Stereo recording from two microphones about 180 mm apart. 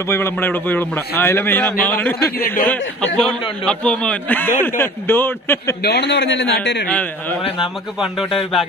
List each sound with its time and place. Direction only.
0.0 s a man's voice: 15° left (ahead or behind)
3.6 s a man's voice: 5° left (ahead or behind)
5.8 s a man's voice: 65° left (ahead or behind)
6.9 s a man's voice: 10° left (ahead or behind)